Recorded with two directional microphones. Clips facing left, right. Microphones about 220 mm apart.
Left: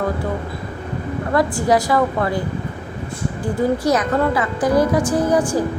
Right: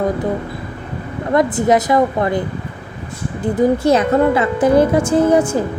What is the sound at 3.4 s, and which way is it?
A woman's voice, 20° right (ahead or behind).